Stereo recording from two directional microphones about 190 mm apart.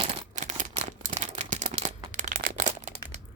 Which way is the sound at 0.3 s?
40° right (ahead or behind).